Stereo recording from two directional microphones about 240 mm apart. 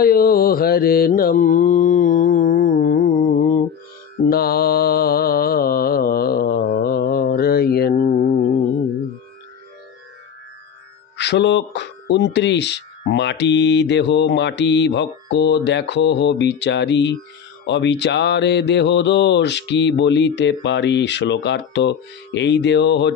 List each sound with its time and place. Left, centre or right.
0.0 s music: left
4.3 s mantra: left
11.1 s speech: left